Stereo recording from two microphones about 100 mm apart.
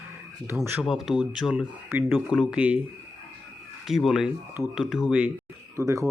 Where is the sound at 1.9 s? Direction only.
25° right (ahead or behind).